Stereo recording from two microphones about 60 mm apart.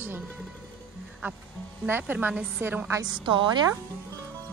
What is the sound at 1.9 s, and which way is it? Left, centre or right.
Speech, right.